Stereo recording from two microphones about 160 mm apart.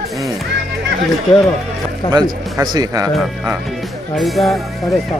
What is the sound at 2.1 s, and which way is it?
Speech, 25° right (ahead or behind).